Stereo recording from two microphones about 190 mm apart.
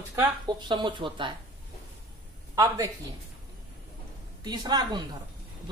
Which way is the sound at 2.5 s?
20° right (ahead or behind).